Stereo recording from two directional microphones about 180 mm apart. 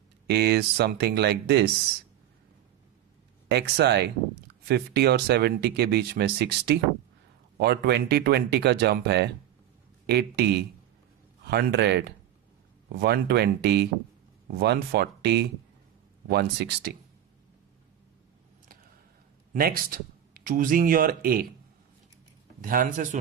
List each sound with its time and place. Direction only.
0.3 s speech: 65° right (ahead or behind)
3.5 s speech: 65° right (ahead or behind)
19.5 s speech: 55° right (ahead or behind)
22.6 s speech: 50° right (ahead or behind)